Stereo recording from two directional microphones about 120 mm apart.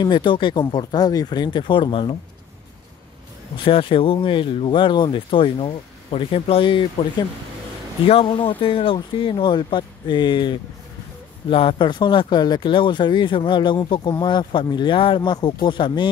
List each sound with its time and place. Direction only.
0.0 s speech: 40° left (ahead or behind)
3.5 s speech: 45° left (ahead or behind)